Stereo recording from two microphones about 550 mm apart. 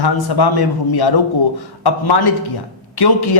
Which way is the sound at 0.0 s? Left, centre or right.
Left.